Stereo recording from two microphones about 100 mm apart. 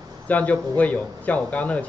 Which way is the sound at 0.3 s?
15° left (ahead or behind).